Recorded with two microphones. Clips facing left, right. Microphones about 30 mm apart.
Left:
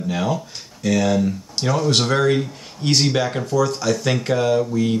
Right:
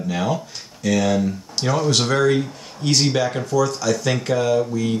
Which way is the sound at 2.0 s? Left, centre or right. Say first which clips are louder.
Even; centre.